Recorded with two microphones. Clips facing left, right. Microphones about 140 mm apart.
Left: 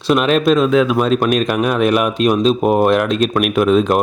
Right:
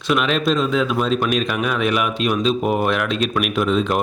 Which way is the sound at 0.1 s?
45° left (ahead or behind).